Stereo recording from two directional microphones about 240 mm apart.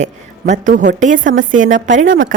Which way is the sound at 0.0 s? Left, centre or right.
Right.